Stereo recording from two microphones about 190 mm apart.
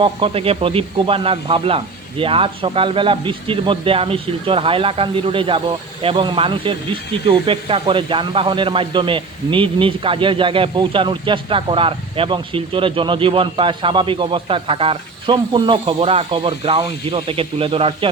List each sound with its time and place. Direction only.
0.0 s speech: 30° right (ahead or behind)